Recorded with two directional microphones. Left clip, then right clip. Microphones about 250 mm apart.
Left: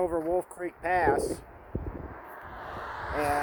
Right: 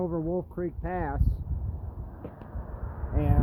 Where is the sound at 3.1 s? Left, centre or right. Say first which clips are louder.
Left 5 dB; centre.